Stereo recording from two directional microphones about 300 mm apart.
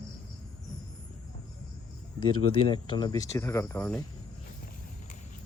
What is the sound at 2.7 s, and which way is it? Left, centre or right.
Speech, centre.